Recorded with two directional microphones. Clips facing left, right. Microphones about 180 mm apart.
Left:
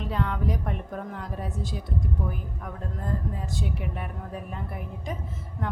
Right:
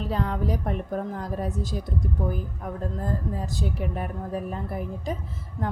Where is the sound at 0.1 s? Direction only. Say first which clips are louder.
Right 1 dB; 35° right (ahead or behind).